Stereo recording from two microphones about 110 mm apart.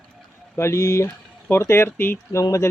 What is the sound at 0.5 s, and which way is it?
Speech, 25° left (ahead or behind).